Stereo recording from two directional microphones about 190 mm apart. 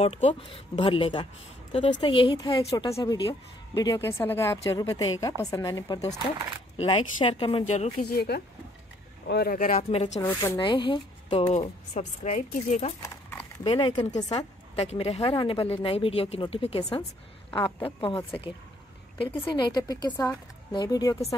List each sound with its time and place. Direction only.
0.0 s a woman's voice: 30° left (ahead or behind)
8.0 s speech: 55° left (ahead or behind)
9.8 s a woman's voice: 35° left (ahead or behind)
10.2 s speech: 15° left (ahead or behind)
10.6 s a woman's voice: 25° left (ahead or behind)
13.0 s a sound: 15° left (ahead or behind)
13.7 s a woman's voice: 25° left (ahead or behind)